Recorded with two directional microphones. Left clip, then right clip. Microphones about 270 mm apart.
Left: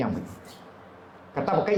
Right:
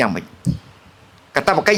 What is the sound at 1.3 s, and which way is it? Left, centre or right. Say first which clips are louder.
Speech: right 9 dB; right.